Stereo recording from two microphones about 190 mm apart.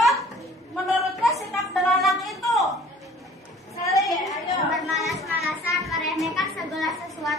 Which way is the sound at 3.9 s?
Centre (ahead or behind).